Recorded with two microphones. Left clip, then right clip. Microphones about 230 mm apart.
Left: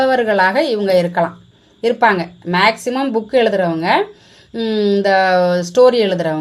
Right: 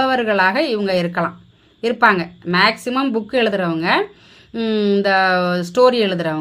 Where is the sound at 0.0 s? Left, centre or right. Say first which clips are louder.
Left 2 dB; left.